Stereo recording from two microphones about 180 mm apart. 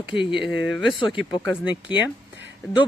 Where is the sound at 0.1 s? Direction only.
30° left (ahead or behind).